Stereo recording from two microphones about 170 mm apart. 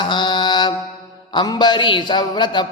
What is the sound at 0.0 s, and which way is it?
Mantra, 25° left (ahead or behind).